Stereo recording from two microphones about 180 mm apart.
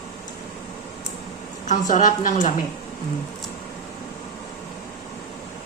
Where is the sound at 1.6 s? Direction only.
45° left (ahead or behind).